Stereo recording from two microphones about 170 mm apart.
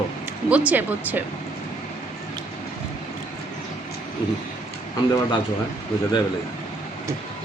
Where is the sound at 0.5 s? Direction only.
10° right (ahead or behind).